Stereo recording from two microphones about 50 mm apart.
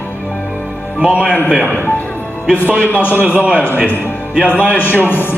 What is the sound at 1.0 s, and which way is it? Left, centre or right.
Speech, centre.